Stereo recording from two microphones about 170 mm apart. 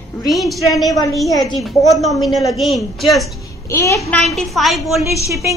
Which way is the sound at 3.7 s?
20° left (ahead or behind).